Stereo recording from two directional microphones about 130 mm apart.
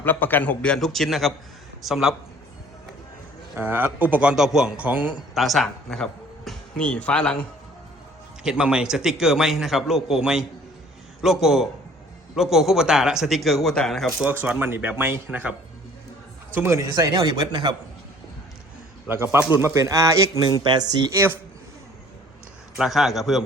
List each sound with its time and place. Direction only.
0.0 s a man's voice: 15° left (ahead or behind); by 2.1 s centre (ahead or behind)
3.5 s a man's voice: 10° right (ahead or behind)
5.3 s speech: centre (ahead or behind)
8.4 s a man's voice: 5° right (ahead or behind)
14.3 s a man's voice: 10° right (ahead or behind)
16.6 s a man's voice: 20° right (ahead or behind)
17.1 s speech: 35° right (ahead or behind)
19.0 s a man's voice: 20° right (ahead or behind)
22.8 s a man's voice: centre (ahead or behind)